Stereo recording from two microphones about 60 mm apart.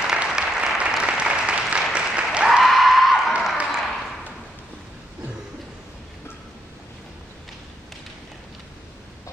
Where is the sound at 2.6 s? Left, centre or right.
Centre.